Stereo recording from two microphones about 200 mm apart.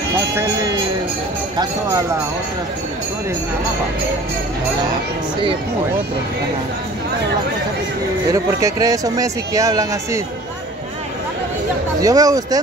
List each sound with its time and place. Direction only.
1.6 s speech: 15° right (ahead or behind)
8.3 s speech: 15° right (ahead or behind)
12.0 s speech: 15° right (ahead or behind)